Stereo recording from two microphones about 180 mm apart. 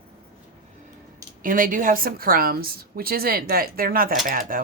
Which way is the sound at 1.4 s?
50° right (ahead or behind).